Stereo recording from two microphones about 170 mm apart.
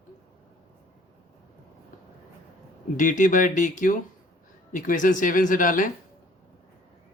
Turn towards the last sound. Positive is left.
turn(degrees=50)  # may be behind; listen again after turning